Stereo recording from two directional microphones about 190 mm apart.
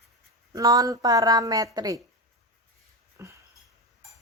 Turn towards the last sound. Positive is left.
turn(degrees=-15)  # may be behind; listen again after turning